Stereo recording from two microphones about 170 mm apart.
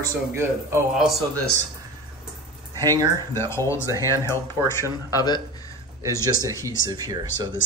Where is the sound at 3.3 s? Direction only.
15° left (ahead or behind).